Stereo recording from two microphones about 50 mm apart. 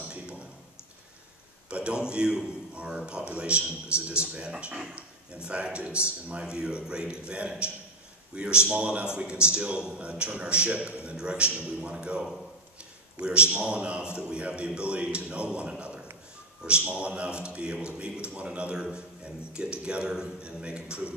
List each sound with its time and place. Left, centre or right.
1.7 s a man's voice: right
13.2 s a man's voice: right